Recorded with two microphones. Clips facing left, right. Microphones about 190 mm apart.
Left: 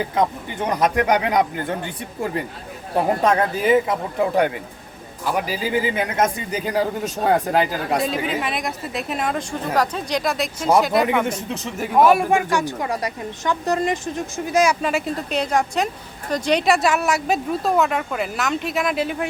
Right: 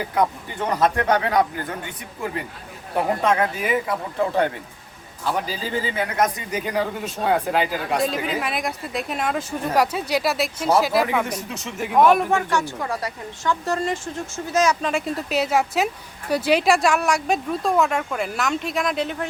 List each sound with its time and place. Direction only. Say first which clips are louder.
0.1 s speech: left 1 dB; 20° left (ahead or behind)
2.9 s a man's voice: left 2 dB; 30° left (ahead or behind)
8.0 s speech: left 1 dB; centre (ahead or behind)
11.3 s speech: left 4 dB; 30° left (ahead or behind)
11.9 s speech: left 1 dB; 5° left (ahead or behind)